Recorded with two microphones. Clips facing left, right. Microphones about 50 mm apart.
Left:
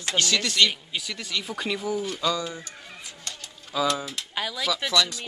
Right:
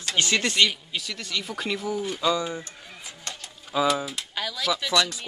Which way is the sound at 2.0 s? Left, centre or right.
Centre.